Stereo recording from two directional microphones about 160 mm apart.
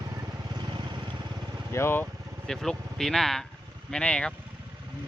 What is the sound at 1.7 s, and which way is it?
Speech, 15° left (ahead or behind).